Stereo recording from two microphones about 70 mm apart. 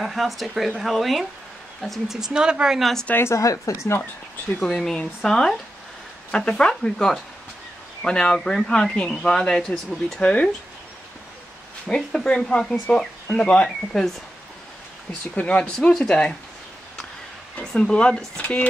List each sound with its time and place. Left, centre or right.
0.0 s speech: centre
2.1 s speech: centre
2.8 s speech: centre
3.2 s a woman's voice: left
3.4 s speech: left
4.6 s speech: centre
11.9 s speech: centre
15.3 s speech: centre
17.7 s speech: centre